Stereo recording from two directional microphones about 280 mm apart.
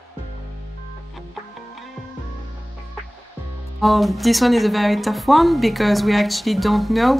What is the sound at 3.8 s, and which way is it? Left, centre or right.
Speech, centre.